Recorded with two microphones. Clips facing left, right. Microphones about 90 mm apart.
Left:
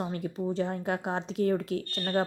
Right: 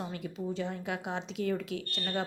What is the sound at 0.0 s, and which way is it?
Speech, 40° left (ahead or behind).